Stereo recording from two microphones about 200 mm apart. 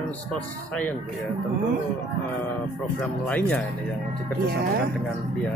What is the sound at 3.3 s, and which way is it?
Speech, 5° left (ahead or behind).